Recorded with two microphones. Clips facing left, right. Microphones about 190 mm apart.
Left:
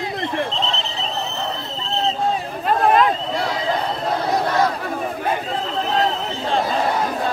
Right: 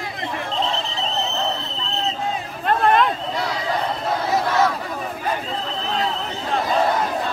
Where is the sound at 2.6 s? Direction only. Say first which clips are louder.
Left 1 dB; centre (ahead or behind).